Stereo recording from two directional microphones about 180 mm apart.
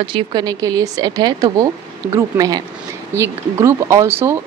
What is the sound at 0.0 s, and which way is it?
Speech, 25° right (ahead or behind).